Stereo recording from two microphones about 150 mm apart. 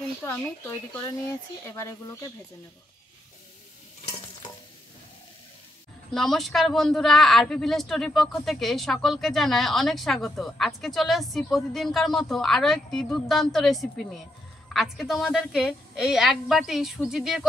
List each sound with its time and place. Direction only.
0.2 s speech: 15° left (ahead or behind)
6.1 s speech: centre (ahead or behind)